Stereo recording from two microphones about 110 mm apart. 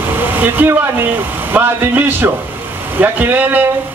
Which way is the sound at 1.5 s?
15° right (ahead or behind).